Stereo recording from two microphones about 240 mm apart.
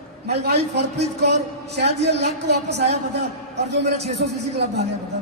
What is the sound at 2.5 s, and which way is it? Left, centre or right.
Speech, right.